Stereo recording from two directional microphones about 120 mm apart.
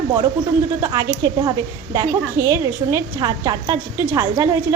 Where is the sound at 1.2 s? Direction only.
30° right (ahead or behind).